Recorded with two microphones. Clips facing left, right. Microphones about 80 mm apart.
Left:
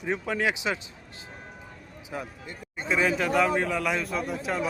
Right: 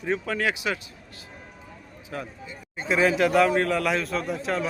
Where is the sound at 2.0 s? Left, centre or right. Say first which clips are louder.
Right 1 dB; centre.